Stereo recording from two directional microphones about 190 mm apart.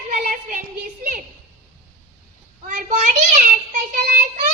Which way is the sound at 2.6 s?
40° right (ahead or behind).